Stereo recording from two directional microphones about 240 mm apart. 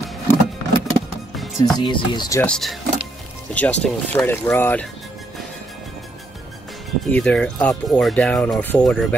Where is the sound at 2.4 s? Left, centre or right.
Centre.